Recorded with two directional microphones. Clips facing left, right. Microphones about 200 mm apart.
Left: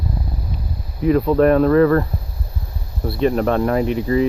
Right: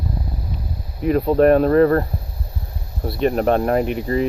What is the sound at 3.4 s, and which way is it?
Speech, 30° right (ahead or behind).